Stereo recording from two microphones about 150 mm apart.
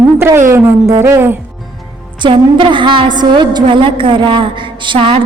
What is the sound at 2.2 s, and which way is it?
A woman's voice, 35° right (ahead or behind).